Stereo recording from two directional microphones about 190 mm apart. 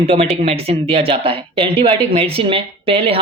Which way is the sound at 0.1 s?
30° right (ahead or behind).